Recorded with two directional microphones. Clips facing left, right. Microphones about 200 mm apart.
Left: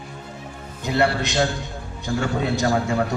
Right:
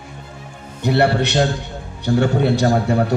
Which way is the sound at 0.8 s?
65° right (ahead or behind).